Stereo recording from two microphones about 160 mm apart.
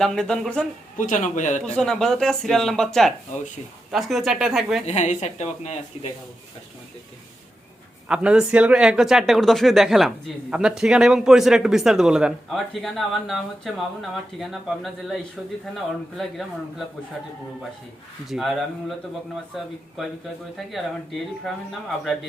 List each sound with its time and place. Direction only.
0.0 s speech: 5° left (ahead or behind)
0.9 s speech: 55° left (ahead or behind)
1.6 s speech: 5° left (ahead or behind)
4.9 s speech: 45° left (ahead or behind)
8.0 s speech: 5° right (ahead or behind)
18.3 s speech: centre (ahead or behind)
20.7 s speech: centre (ahead or behind)